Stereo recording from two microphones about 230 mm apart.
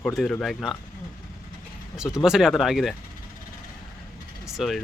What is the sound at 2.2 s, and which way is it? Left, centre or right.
Speech, centre.